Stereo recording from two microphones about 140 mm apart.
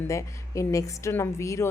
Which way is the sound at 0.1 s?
20° left (ahead or behind).